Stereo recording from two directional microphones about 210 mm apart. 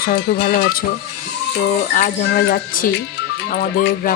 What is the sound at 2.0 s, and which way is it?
Speech, 45° left (ahead or behind).